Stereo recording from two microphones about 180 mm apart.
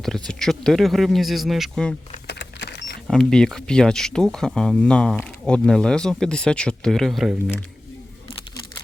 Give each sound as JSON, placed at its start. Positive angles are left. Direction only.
{"t": 0.3, "sound": "speech", "side_deg": 5}
{"t": 2.2, "sound": "vehicle", "side_deg": 70}
{"t": 3.1, "sound": "speech", "side_deg": 0}